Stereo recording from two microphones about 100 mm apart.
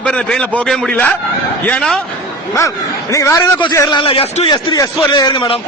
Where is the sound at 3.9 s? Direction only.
60° left (ahead or behind).